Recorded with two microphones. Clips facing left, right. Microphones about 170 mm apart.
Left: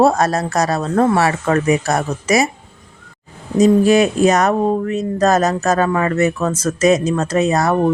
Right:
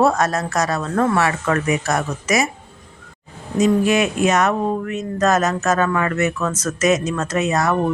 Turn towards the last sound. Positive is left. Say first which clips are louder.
# left 4 dB
turn(degrees=35)  # may be behind; listen again after turning